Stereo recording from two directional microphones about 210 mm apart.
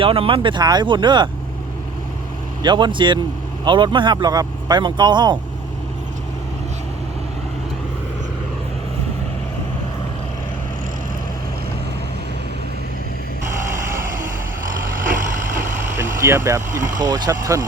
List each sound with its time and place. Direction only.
0.0 s speech: 25° right (ahead or behind)
2.6 s speech: 20° right (ahead or behind)
16.0 s speech: 10° right (ahead or behind)